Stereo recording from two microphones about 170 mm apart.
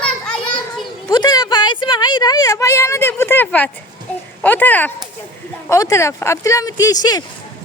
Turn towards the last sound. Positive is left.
turn(degrees=20)  # may be behind; listen again after turning